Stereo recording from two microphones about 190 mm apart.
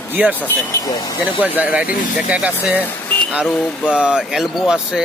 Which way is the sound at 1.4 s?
10° right (ahead or behind).